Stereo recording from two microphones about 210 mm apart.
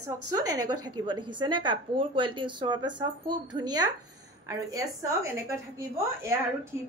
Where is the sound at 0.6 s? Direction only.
90° right.